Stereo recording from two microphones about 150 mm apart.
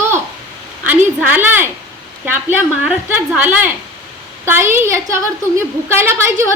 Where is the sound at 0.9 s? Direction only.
10° right (ahead or behind).